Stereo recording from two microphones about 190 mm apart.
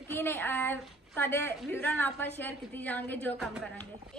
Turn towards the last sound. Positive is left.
turn(degrees=10)  # may be behind; listen again after turning